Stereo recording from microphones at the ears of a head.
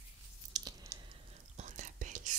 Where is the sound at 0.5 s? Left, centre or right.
Right.